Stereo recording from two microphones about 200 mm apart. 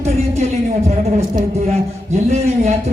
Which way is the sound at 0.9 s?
35° right (ahead or behind).